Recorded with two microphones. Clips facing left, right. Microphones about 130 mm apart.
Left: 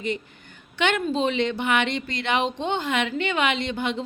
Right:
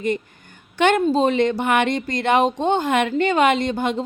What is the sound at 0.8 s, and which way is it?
A woman's voice, 40° right (ahead or behind).